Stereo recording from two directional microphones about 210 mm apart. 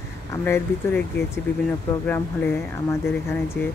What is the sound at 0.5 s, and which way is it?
Speech, 10° left (ahead or behind).